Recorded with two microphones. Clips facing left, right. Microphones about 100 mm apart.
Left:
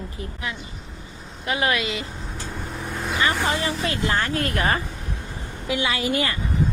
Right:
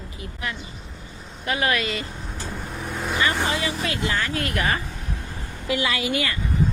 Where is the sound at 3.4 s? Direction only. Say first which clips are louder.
Left 1 dB; 35° left (ahead or behind).